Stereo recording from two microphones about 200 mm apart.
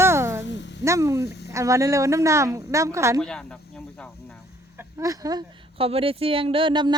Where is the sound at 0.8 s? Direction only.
15° right (ahead or behind).